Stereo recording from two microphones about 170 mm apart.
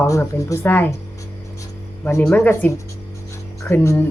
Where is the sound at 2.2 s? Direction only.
10° left (ahead or behind).